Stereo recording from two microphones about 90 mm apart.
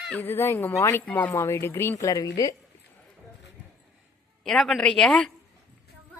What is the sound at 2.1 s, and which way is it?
Speech, 40° left (ahead or behind).